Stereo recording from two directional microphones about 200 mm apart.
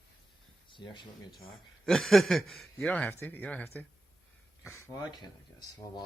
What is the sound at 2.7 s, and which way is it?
Speech, 5° left (ahead or behind).